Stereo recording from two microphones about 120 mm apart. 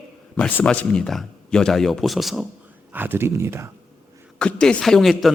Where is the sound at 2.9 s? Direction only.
15° right (ahead or behind).